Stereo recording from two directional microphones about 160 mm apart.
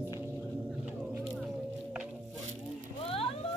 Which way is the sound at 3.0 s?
35° left (ahead or behind).